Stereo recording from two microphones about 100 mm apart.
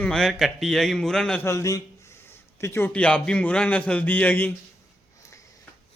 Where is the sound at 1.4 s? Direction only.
30° left (ahead or behind).